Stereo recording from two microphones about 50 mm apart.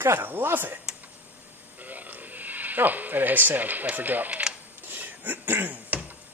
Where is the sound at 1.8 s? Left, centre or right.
Right.